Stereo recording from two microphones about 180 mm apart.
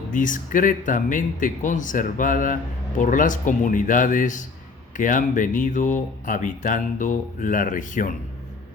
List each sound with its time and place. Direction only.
0.1 s speech: 45° left (ahead or behind)